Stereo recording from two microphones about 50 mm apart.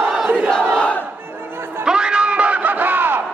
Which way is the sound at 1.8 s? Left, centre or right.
Centre.